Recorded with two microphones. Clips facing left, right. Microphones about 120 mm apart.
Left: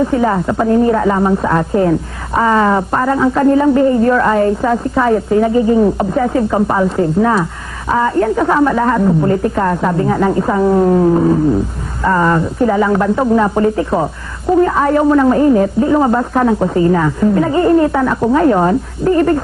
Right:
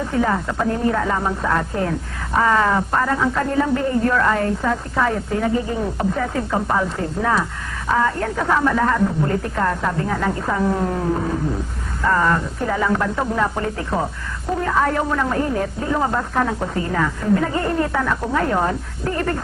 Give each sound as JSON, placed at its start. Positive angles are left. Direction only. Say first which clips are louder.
{"t": 0.2, "sound": "a woman's voice", "louder": "left 6 dB", "side_deg": 20}
{"t": 12.0, "sound": "a woman's voice", "louder": "left 6 dB", "side_deg": 20}